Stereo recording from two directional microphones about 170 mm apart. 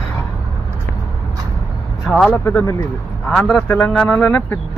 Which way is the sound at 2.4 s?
20° left (ahead or behind).